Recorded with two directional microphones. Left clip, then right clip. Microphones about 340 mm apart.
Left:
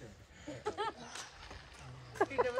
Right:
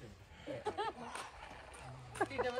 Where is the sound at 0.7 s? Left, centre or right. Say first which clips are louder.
Left 2 dB; centre.